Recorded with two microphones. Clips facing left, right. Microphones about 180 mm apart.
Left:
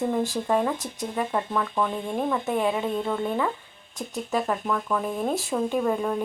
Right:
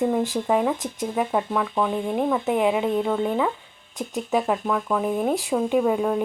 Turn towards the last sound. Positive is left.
turn(degrees=-10)  # may be behind; listen again after turning